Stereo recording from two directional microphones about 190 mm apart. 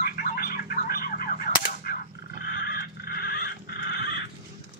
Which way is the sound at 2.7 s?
55° left (ahead or behind).